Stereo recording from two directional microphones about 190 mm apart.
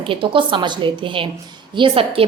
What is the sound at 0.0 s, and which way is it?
A woman's voice, 25° right (ahead or behind).